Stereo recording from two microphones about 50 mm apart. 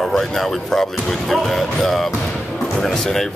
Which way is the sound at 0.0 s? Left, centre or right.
Centre.